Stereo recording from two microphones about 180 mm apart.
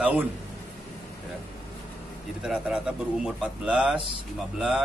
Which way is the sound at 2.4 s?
5° right (ahead or behind).